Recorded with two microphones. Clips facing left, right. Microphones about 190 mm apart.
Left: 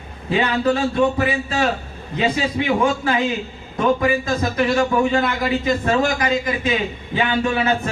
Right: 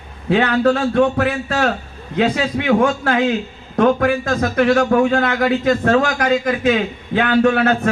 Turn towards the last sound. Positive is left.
turn(degrees=-65)  # may be behind; listen again after turning